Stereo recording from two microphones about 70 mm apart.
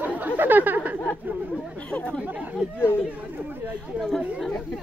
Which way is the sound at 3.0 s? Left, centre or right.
Right.